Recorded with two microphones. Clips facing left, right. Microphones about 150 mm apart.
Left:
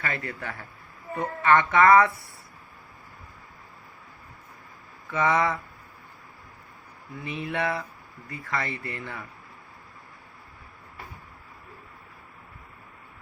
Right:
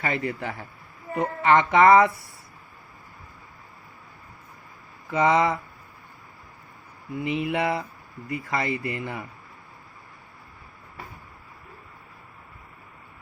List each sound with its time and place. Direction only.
0.0 s a woman's voice: 20° right (ahead or behind)
5.0 s a woman's voice: 20° right (ahead or behind)
7.1 s a woman's voice: 20° right (ahead or behind)